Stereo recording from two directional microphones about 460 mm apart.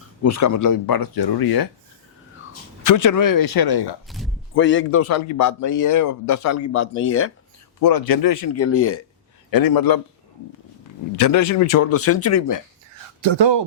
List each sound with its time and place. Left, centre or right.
0.3 s speech: left
2.8 s speech: left
4.5 s a man's voice: left
7.8 s a man's voice: left
9.5 s speech: left
11.2 s a man's voice: left
13.2 s speech: right